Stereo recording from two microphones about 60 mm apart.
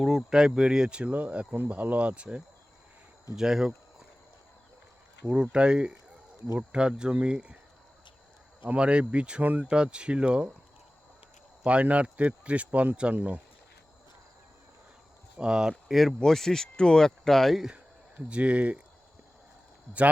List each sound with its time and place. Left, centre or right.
0.0 s speech: centre; by 2.4 s right
3.3 s speech: centre
5.2 s speech: centre
8.6 s speech: centre
9.4 s speech: right
9.6 s speech: centre
11.6 s speech: right
15.4 s speech: centre
15.9 s speech: centre
18.3 s speech: centre